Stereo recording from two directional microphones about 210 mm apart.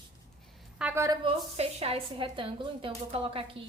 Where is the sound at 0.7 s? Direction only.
10° right (ahead or behind).